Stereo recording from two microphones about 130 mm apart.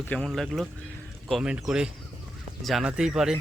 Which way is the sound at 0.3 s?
Centre (ahead or behind).